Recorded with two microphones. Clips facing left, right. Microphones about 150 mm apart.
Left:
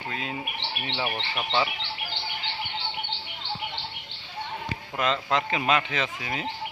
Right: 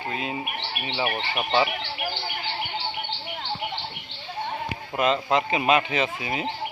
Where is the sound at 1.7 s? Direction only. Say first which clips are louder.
Right 5 dB; 55° right (ahead or behind).